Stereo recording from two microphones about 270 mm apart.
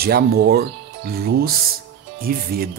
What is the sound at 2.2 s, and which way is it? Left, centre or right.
Speech, right.